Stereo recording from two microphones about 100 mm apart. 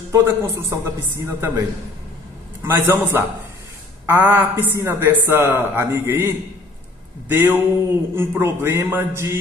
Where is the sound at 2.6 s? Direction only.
20° right (ahead or behind).